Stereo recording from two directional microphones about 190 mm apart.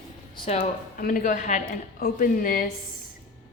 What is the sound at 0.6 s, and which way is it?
Speech, 45° left (ahead or behind).